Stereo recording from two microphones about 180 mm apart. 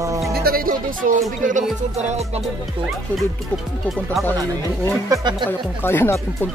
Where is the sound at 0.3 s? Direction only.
55° right (ahead or behind).